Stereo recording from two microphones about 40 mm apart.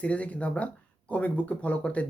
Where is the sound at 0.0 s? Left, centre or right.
Left.